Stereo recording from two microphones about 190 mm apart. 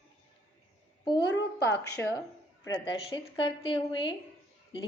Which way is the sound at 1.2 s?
60° left (ahead or behind).